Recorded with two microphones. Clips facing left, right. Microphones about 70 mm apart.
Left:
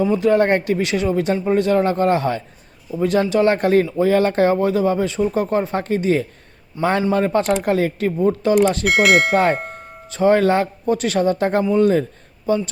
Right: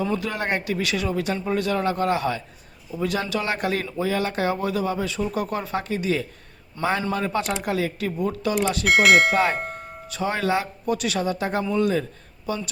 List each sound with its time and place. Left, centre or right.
0.0 s speech: left
0.3 s speech: left
6.8 s a man's voice: centre
7.1 s speech: left
8.8 s speech: centre
10.1 s speech: left